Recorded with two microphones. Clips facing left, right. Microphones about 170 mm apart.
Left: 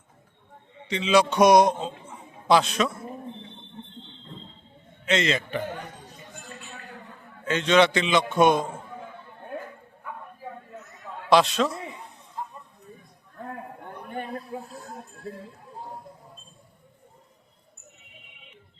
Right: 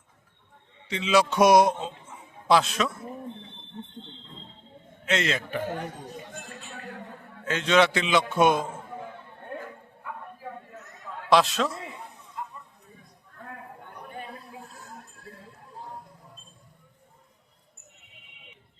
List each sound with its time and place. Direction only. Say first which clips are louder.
0.9 s a man's voice: left 2 dB; 5° right (ahead or behind)
1.8 s a sound: left 2 dB; centre (ahead or behind)
5.0 s a man's voice: left 3 dB; 5° right (ahead or behind)
7.4 s a man's voice: left 2 dB; 5° right (ahead or behind)
11.3 s a man's voice: left 2 dB; centre (ahead or behind)
12.4 s a sound: left 2 dB; 30° left (ahead or behind)